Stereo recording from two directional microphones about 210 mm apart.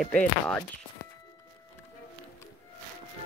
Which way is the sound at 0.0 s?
5° left (ahead or behind).